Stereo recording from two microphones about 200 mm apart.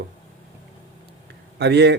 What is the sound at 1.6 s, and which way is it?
Speech, 55° right (ahead or behind).